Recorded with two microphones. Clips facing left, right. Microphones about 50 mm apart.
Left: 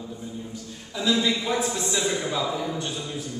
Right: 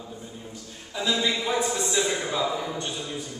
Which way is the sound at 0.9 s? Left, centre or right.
Centre.